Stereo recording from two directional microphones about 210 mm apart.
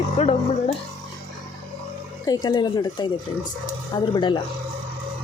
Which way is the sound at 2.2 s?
20° left (ahead or behind).